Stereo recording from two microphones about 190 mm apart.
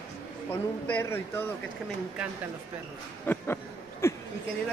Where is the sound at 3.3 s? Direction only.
10° left (ahead or behind).